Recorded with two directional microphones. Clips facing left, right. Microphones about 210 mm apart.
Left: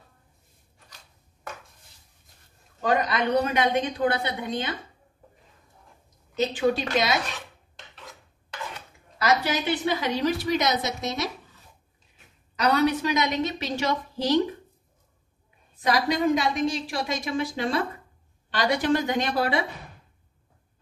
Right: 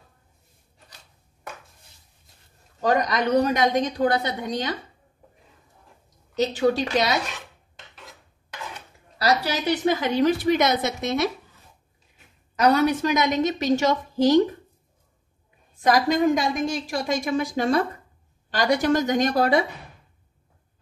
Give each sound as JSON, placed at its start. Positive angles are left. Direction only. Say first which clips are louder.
{"t": 2.8, "sound": "a woman's voice", "louder": "right 2 dB", "side_deg": -40}
{"t": 6.3, "sound": "a woman's voice", "louder": "right 2 dB", "side_deg": -40}
{"t": 9.2, "sound": "a woman's voice", "louder": "right 1 dB", "side_deg": -35}
{"t": 12.5, "sound": "a woman's voice", "louder": "right 3 dB", "side_deg": -50}
{"t": 15.8, "sound": "a woman's voice", "louder": "right 4 dB", "side_deg": -45}